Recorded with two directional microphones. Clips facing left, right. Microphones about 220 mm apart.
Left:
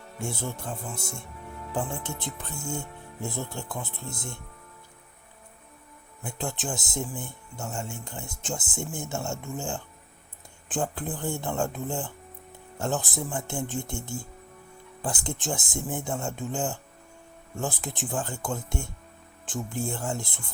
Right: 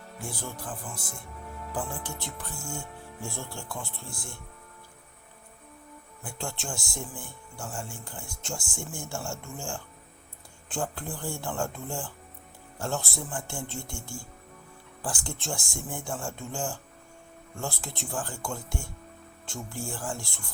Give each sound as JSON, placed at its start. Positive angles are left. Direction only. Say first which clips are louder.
{"t": 0.2, "sound": "speech", "louder": "left 5 dB", "side_deg": 25}
{"t": 6.2, "sound": "speech", "louder": "left 4 dB", "side_deg": 20}